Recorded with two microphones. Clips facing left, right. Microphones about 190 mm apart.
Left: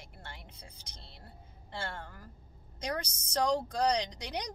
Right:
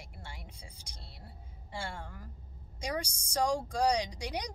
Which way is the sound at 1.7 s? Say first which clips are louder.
Even; 10° right (ahead or behind).